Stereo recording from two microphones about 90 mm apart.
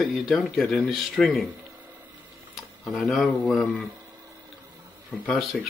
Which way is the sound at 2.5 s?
Centre (ahead or behind).